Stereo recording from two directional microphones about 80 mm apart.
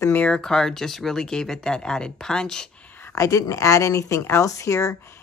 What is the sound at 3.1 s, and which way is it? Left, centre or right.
A woman's voice, left.